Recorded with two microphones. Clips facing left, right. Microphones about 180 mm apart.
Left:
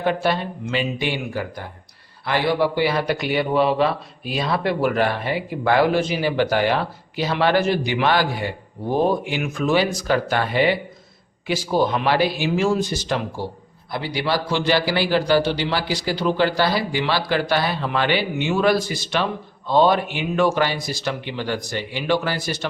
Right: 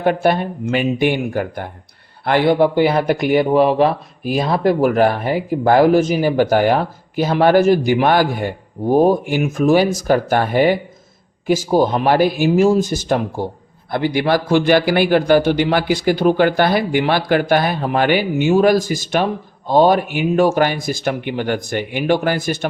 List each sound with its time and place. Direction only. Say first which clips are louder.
0.0 s a man's voice: right 5 dB; 50° right (ahead or behind)